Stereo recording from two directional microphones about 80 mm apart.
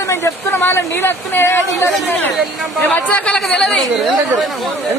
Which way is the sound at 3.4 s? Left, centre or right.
Centre.